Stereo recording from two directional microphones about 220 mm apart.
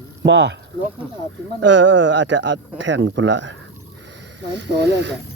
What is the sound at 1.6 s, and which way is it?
Speech, 55° right (ahead or behind).